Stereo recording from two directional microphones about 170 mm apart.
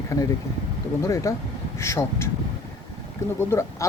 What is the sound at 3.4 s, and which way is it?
Speech, 15° left (ahead or behind).